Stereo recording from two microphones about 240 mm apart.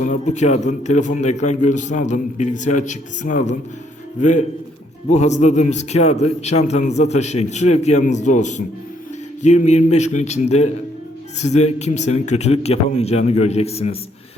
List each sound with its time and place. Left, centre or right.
0.0 s a man's voice: left